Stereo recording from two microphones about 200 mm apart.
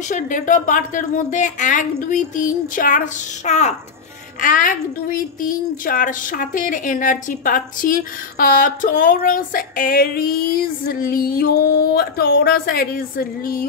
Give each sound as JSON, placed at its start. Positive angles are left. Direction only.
{"t": 0.1, "sound": "a woman's voice", "side_deg": 40}